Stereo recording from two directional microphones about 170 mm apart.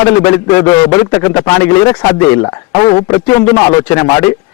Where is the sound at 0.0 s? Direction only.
15° left (ahead or behind).